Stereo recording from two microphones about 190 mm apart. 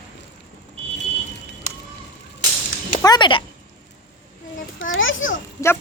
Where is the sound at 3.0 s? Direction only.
20° left (ahead or behind).